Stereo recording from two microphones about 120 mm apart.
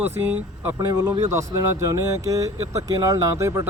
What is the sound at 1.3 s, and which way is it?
Speech, 25° right (ahead or behind).